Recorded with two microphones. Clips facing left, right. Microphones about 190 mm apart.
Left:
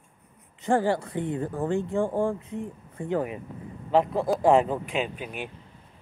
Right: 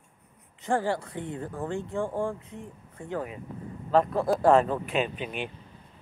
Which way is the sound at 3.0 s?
15° left (ahead or behind).